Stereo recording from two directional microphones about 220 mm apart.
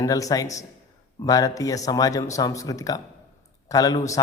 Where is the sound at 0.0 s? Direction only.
15° left (ahead or behind).